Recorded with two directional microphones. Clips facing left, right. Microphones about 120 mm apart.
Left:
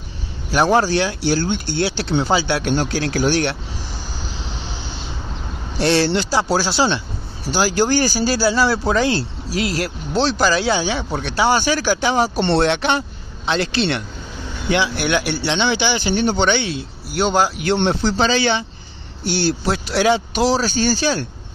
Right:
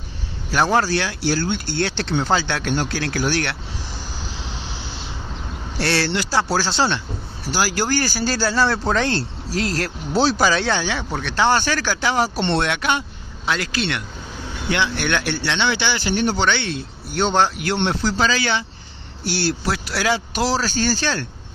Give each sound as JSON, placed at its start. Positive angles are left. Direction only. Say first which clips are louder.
{"t": 0.5, "sound": "speech", "louder": "left 3 dB", "side_deg": 15}
{"t": 5.8, "sound": "speech", "louder": "left 5 dB", "side_deg": 20}
{"t": 10.1, "sound": "speech", "louder": "even", "side_deg": -5}
{"t": 12.4, "sound": "speech", "louder": "left 4 dB", "side_deg": 30}
{"t": 14.7, "sound": "speech", "louder": "left 3 dB", "side_deg": 10}
{"t": 17.7, "sound": "speech", "louder": "left 3 dB", "side_deg": 25}